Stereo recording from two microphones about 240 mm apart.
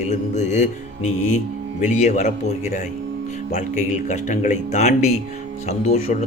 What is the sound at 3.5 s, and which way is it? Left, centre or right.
Speech, left.